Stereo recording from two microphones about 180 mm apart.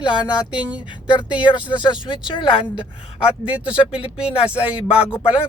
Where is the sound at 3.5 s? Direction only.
5° right (ahead or behind).